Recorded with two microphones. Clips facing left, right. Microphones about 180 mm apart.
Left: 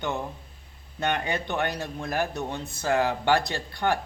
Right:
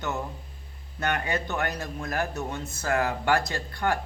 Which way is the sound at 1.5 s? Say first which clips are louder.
Left 2 dB; 25° left (ahead or behind).